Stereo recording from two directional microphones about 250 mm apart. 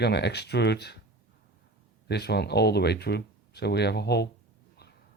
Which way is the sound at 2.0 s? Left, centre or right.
Left.